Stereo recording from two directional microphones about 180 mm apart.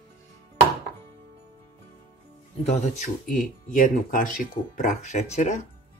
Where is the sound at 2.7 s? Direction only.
45° left (ahead or behind).